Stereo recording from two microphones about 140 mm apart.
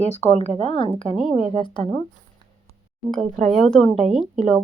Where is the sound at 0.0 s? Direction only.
50° left (ahead or behind); by 1.9 s 35° left (ahead or behind).